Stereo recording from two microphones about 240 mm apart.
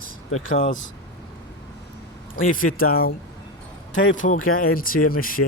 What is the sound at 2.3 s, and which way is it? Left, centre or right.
Speech, left.